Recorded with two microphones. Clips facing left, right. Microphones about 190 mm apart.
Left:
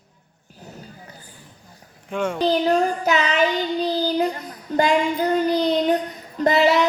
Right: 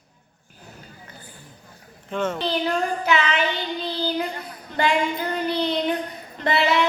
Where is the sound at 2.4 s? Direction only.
40° left (ahead or behind).